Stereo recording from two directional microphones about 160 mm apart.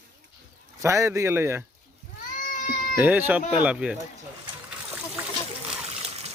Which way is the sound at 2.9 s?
10° right (ahead or behind).